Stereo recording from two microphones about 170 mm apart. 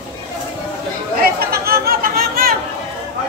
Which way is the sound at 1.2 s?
65° right (ahead or behind).